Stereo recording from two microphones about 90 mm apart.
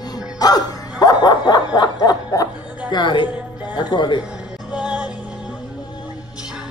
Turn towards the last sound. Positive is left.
turn(degrees=-10)  # may be behind; listen again after turning